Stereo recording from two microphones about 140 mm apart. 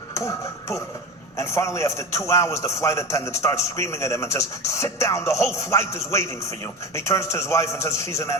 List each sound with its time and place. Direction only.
0.1 s a man's voice: 20° left (ahead or behind)